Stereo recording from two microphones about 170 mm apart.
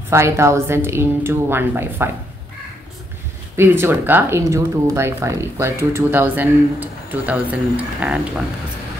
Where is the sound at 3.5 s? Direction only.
15° right (ahead or behind).